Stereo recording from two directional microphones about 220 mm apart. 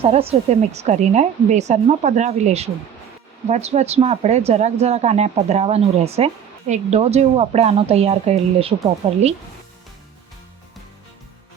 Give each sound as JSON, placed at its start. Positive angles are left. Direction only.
{"t": 0.0, "sound": "a woman's voice", "side_deg": -25}